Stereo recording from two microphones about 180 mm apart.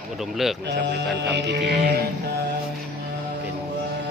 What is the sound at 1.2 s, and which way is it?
Music, 75° right (ahead or behind).